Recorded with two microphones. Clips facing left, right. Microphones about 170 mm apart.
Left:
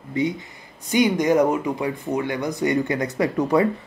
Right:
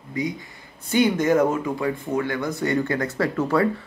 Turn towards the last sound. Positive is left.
turn(degrees=15)  # may be behind; listen again after turning